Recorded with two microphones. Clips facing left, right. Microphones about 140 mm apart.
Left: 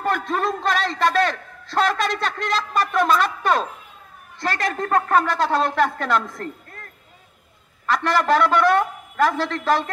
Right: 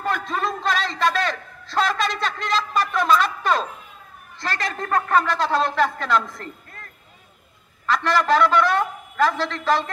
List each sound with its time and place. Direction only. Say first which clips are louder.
0.0 s a sound: left 2 dB; 50° left (ahead or behind)
4.4 s a man's voice: left 3 dB; 55° left (ahead or behind)
7.8 s a man's voice: even; 55° left (ahead or behind)